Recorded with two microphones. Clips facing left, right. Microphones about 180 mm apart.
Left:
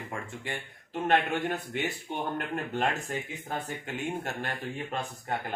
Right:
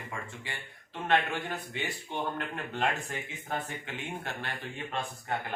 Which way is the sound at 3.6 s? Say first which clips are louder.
Left 5 dB; 40° left (ahead or behind).